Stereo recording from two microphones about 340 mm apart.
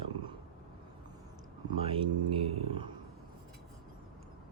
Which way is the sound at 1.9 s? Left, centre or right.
Centre.